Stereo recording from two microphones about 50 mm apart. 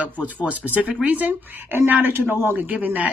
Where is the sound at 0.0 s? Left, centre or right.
Right.